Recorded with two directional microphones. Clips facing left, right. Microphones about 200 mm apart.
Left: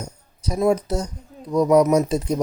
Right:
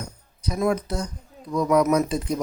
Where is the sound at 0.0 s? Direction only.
40° left (ahead or behind).